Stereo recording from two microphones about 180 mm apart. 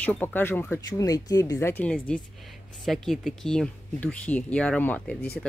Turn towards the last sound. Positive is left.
turn(degrees=10)  # may be behind; listen again after turning